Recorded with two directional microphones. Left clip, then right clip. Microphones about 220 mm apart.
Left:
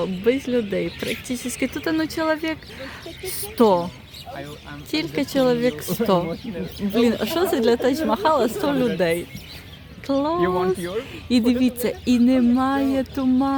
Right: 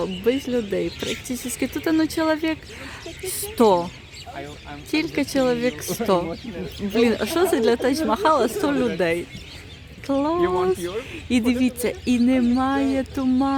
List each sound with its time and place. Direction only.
0.0 s speech: 5° right (ahead or behind)
4.9 s speech: 5° right (ahead or behind)
7.0 s speech: 5° right (ahead or behind)
10.8 s speech: 45° left (ahead or behind)
11.1 s speech: centre (ahead or behind)